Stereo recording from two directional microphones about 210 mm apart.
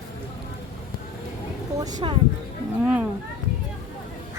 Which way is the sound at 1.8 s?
20° right (ahead or behind).